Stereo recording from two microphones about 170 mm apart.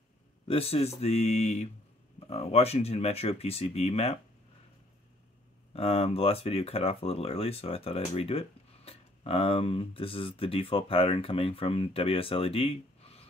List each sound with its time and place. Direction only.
0.5 s speech: 35° left (ahead or behind)
5.7 s speech: 35° left (ahead or behind)